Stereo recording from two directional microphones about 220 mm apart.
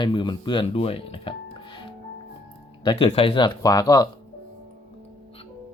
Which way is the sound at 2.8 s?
20° left (ahead or behind).